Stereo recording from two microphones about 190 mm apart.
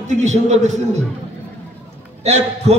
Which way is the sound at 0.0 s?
40° right (ahead or behind).